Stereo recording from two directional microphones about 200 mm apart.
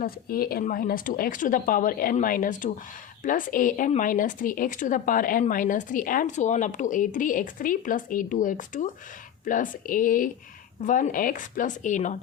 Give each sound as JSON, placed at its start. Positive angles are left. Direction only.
{"t": 0.0, "sound": "speech", "side_deg": 50}